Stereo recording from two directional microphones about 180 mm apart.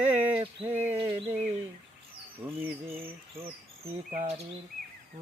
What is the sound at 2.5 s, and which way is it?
Bird, 10° right (ahead or behind).